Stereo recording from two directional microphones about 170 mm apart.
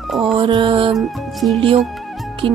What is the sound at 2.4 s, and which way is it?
Music, 30° right (ahead or behind).